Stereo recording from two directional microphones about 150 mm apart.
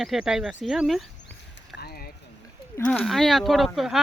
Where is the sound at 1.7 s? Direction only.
90° left.